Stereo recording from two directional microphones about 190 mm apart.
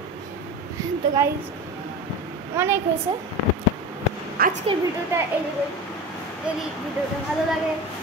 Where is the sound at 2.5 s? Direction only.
15° right (ahead or behind).